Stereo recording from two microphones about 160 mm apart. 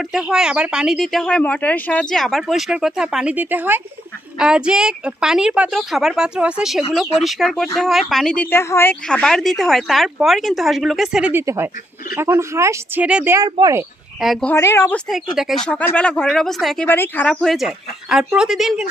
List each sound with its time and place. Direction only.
0.1 s speech: 5° right (ahead or behind); by 8.9 s 15° left (ahead or behind)
9.0 s speech: 5° left (ahead or behind)
11.4 s speech: 15° right (ahead or behind)
13.4 s speech: 20° right (ahead or behind)
14.2 s speech: centre (ahead or behind)
14.5 s speech: 15° left (ahead or behind)
15.0 s speech: centre (ahead or behind)